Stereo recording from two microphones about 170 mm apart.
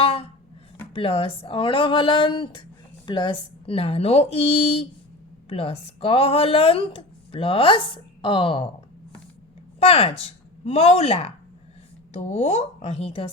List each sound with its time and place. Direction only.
0.0 s a sound: 35° left (ahead or behind)
0.9 s speech: 35° left (ahead or behind)
9.8 s speech: 35° left (ahead or behind)